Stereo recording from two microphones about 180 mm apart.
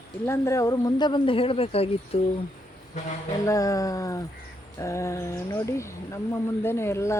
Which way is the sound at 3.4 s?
20° left (ahead or behind).